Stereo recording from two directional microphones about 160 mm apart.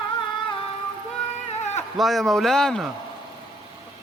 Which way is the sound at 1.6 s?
45° left (ahead or behind).